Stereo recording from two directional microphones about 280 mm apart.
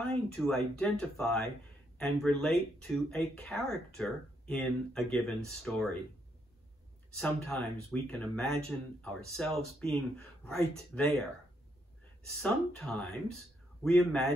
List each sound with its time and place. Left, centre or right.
0.3 s speech: centre
7.2 s speech: centre
12.4 s speech: centre